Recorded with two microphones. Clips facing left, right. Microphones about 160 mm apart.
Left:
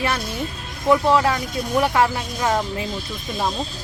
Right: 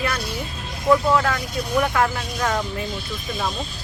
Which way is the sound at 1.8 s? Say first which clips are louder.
Left 3 dB; 25° left (ahead or behind).